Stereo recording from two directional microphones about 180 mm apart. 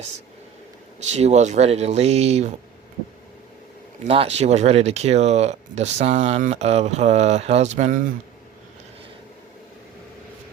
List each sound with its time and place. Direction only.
1.1 s speech: 40° right (ahead or behind)
4.0 s speech: 35° right (ahead or behind)